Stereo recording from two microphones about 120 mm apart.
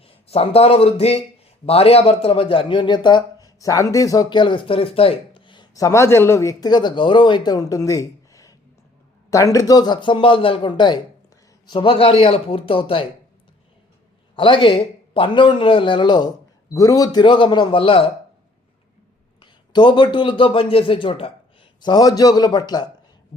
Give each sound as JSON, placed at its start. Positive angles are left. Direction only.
{"t": 0.0, "sound": "a man's voice", "side_deg": 55}
{"t": 5.7, "sound": "a man's voice", "side_deg": 25}
{"t": 14.3, "sound": "a man's voice", "side_deg": 45}
{"t": 19.4, "sound": "a man's voice", "side_deg": 40}
{"t": 21.8, "sound": "speech", "side_deg": 35}